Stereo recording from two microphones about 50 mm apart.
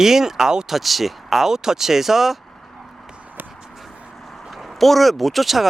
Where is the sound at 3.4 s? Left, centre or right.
Right.